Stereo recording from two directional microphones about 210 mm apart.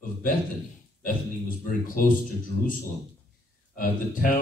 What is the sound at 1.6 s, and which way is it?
Speech, 40° left (ahead or behind).